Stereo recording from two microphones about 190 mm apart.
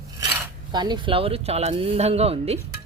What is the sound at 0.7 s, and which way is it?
Speech, 25° right (ahead or behind).